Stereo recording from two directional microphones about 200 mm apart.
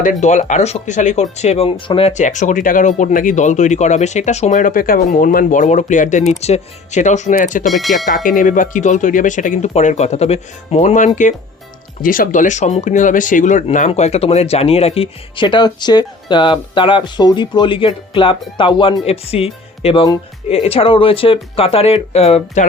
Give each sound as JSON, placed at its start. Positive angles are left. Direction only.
{"t": 0.0, "sound": "speech", "side_deg": 35}
{"t": 7.7, "sound": "speech", "side_deg": 0}
{"t": 8.0, "sound": "speech", "side_deg": 40}